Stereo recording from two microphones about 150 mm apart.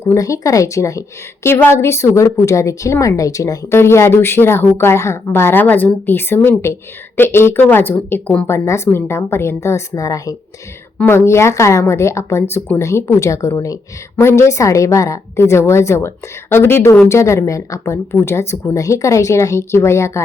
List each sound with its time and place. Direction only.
0.0 s a woman's voice: 20° left (ahead or behind)